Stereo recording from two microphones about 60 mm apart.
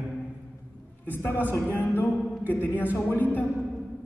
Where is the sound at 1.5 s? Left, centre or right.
Left.